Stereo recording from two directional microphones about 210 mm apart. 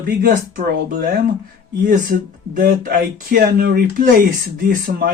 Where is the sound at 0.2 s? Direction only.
45° right (ahead or behind).